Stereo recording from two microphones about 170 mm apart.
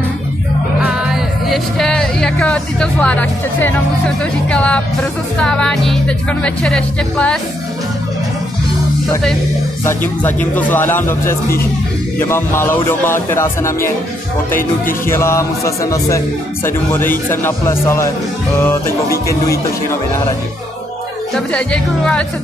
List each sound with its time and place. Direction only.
0.8 s speech: centre (ahead or behind)
9.8 s speech: 10° left (ahead or behind)
15.0 s speech: 15° left (ahead or behind)
21.5 s speech: 5° left (ahead or behind)